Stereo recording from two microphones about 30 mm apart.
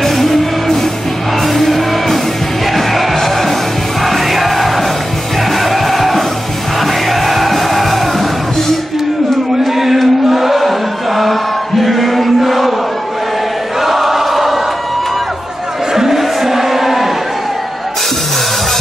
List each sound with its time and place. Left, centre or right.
0.0 s music: centre
9.8 s chant: centre
13.7 s choir: centre
15.9 s a sound: centre